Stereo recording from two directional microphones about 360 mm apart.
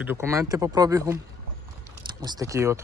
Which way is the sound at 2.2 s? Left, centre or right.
Centre.